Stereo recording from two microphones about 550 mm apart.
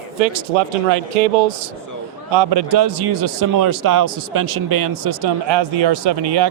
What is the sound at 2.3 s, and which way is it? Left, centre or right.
Speech, right.